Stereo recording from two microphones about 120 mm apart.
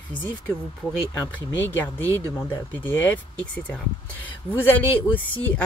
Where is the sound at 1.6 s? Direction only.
15° left (ahead or behind).